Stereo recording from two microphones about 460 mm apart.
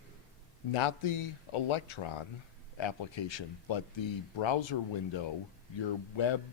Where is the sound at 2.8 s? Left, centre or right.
Left.